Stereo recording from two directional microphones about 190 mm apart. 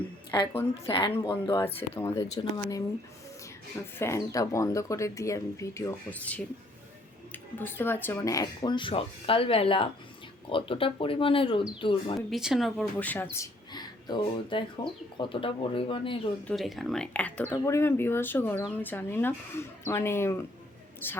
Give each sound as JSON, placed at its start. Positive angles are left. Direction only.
{"t": 0.5, "sound": "speech", "side_deg": 10}
{"t": 3.9, "sound": "speech", "side_deg": 15}
{"t": 7.6, "sound": "speech", "side_deg": 10}
{"t": 12.3, "sound": "speech", "side_deg": 0}
{"t": 16.5, "sound": "speech", "side_deg": 0}